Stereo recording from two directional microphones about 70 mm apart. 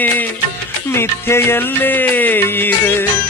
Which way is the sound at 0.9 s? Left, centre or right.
Left.